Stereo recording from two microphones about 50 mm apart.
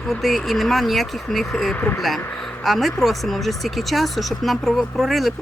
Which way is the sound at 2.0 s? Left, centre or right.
Centre.